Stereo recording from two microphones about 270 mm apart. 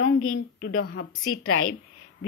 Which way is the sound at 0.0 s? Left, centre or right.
Left.